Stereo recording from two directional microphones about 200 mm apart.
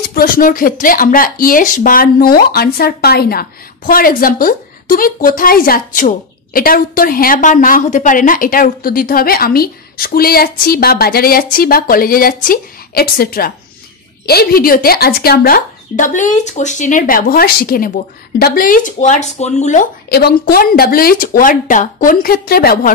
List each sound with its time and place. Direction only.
0.1 s speech: 45° left (ahead or behind)
20.1 s speech: 50° left (ahead or behind)